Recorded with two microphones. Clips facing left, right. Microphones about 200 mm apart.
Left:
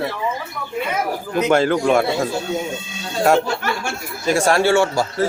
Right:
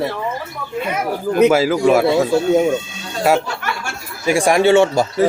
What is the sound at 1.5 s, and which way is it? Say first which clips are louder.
Speech: right 2 dB; 5° right (ahead or behind).